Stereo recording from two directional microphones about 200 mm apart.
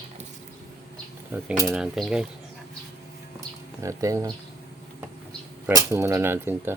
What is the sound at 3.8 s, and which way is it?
Speech, 15° right (ahead or behind).